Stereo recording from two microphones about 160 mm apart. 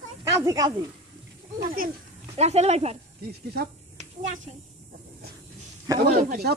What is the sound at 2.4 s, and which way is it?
Speech, 40° right (ahead or behind).